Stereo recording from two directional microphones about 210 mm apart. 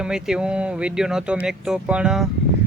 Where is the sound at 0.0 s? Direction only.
5° right (ahead or behind).